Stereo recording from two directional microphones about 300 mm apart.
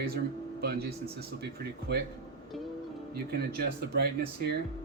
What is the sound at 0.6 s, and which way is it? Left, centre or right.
A man's voice, right.